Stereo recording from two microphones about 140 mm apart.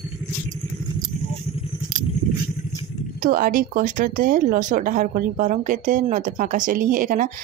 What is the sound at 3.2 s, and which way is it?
Speech, 85° right.